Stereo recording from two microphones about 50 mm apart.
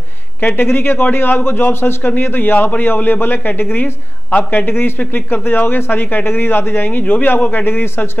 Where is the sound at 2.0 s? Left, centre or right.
Left.